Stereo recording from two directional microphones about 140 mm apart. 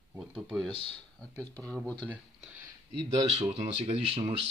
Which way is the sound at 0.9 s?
10° left (ahead or behind).